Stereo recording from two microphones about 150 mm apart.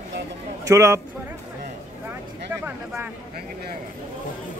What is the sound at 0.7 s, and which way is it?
Speech, 20° right (ahead or behind).